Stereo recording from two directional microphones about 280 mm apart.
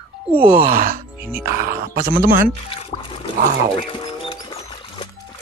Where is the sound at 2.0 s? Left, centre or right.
Right.